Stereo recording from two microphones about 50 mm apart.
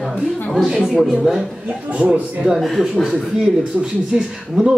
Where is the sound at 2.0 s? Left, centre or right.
Right.